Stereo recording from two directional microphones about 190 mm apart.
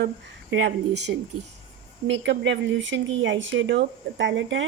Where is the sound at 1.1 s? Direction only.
55° right (ahead or behind).